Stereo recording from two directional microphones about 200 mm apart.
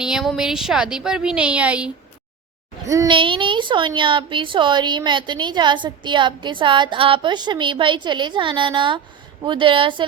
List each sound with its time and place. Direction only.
0.0 s a woman's voice: centre (ahead or behind)
2.8 s a woman's voice: 15° right (ahead or behind)